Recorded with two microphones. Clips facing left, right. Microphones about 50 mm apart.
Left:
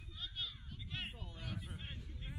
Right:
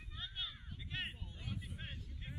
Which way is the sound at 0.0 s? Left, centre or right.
Right.